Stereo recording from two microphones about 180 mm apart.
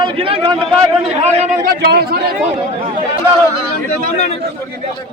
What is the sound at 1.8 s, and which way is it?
Speech, 65° right (ahead or behind).